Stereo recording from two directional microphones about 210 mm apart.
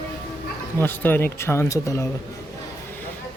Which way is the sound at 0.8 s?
10° left (ahead or behind).